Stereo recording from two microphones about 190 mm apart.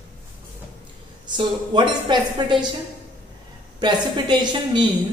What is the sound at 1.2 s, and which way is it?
A woman's voice, 25° right (ahead or behind).